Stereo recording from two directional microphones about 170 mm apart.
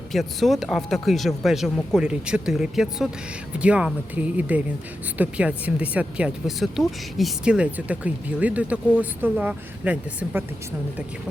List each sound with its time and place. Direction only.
0.1 s speech: centre (ahead or behind)